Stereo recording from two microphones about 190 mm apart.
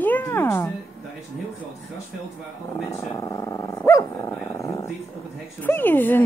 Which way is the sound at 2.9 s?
15° left (ahead or behind).